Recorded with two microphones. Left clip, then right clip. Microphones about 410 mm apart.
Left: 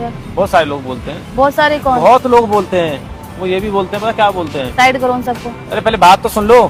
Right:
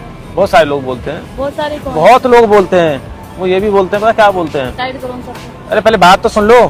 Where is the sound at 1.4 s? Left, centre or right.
Left.